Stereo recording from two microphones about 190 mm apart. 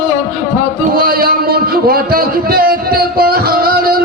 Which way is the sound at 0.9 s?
50° right (ahead or behind).